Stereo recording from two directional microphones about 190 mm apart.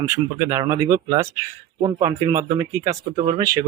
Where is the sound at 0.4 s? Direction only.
15° right (ahead or behind).